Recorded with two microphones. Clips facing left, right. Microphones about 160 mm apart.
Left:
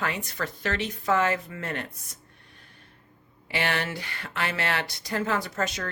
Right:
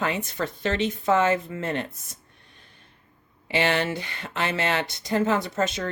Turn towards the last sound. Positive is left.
turn(degrees=-25)  # may be behind; listen again after turning